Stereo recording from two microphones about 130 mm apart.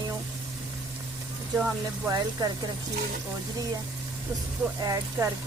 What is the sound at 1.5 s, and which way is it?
Speech, 10° right (ahead or behind).